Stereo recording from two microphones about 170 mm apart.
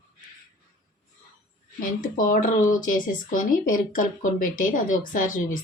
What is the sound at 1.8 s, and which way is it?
Speech, 55° left (ahead or behind).